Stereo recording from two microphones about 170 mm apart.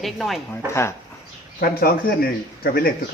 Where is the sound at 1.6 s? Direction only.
60° left (ahead or behind).